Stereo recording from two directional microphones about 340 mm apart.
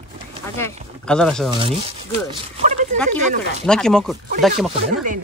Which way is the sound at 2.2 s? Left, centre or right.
Right.